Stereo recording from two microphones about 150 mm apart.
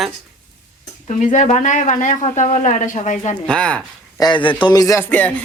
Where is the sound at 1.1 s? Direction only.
50° left (ahead or behind).